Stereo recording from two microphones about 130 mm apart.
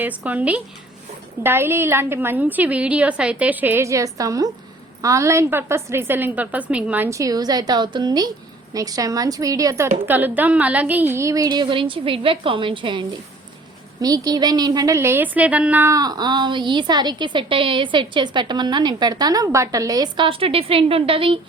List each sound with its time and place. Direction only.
0.2 s a woman's voice: 10° right (ahead or behind)
7.2 s a woman's voice: 30° right (ahead or behind)
10.1 s a woman's voice: 15° right (ahead or behind); by 13.1 s 40° right (ahead or behind)
14.0 s a woman's voice: 30° right (ahead or behind); by 15.9 s 10° right (ahead or behind)
15.9 s a woman's voice: 30° right (ahead or behind)
20.2 s a woman's voice: 45° right (ahead or behind)